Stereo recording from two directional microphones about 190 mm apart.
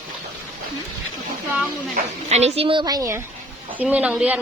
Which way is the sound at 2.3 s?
35° right (ahead or behind).